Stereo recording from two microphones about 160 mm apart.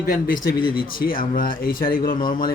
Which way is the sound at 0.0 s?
65° left (ahead or behind).